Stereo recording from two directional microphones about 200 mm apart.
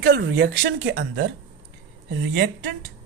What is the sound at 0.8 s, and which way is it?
Speech, 65° right (ahead or behind).